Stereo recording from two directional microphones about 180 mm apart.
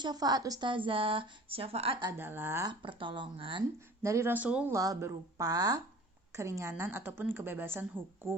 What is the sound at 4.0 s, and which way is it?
Speech, 15° right (ahead or behind).